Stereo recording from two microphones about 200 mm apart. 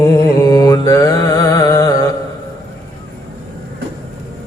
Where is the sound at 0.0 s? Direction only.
15° left (ahead or behind).